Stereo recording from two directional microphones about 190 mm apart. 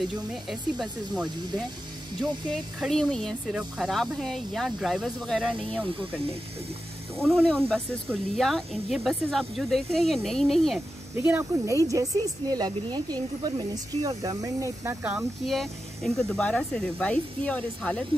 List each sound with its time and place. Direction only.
0.0 s speech: centre (ahead or behind)
2.5 s speech: centre (ahead or behind)
11.1 s speech: 10° right (ahead or behind)
15.4 s speech: centre (ahead or behind)